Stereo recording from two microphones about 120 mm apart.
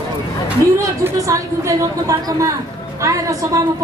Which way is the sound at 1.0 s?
25° right (ahead or behind).